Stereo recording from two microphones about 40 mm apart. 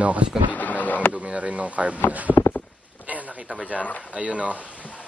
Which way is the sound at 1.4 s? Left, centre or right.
Right.